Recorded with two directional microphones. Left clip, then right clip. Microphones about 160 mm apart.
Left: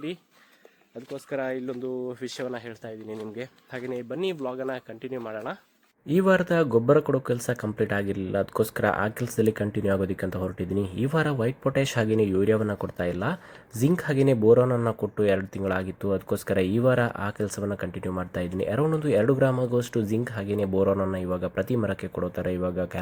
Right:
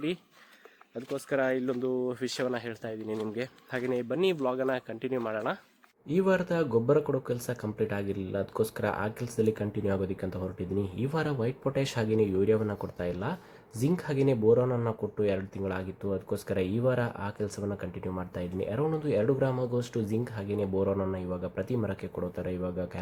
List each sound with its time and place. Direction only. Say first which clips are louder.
1.1 s speech: right 2 dB; 10° right (ahead or behind)
6.1 s speech: left 5 dB; 30° left (ahead or behind)